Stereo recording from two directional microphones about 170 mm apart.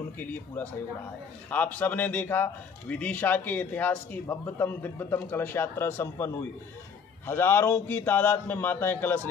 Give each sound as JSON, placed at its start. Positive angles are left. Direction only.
{"t": 0.2, "sound": "speech", "side_deg": 10}